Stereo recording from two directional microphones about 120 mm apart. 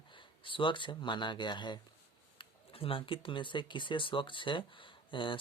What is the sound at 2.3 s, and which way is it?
Speech, 50° left (ahead or behind).